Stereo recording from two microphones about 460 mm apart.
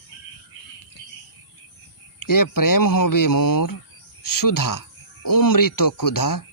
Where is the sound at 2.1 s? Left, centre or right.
Left.